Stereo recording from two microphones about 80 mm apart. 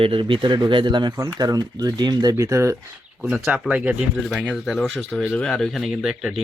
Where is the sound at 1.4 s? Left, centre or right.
Right.